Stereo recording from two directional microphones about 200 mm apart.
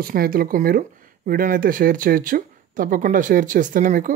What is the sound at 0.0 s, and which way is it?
Speech, 45° right (ahead or behind).